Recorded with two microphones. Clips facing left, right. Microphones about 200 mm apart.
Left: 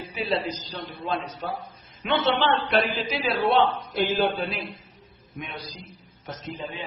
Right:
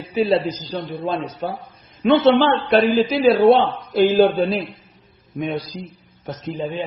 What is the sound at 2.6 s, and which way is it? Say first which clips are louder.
Speech: right 9 dB; 35° right (ahead or behind).